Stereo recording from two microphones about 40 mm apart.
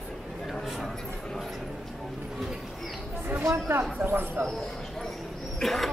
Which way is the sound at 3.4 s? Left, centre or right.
Right.